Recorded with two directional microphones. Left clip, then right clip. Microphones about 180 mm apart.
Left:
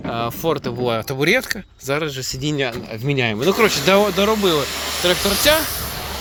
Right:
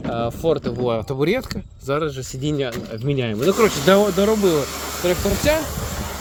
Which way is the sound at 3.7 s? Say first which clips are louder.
Even; 20° right (ahead or behind).